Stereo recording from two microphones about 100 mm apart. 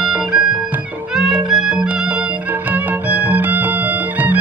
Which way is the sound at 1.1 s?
5° right (ahead or behind).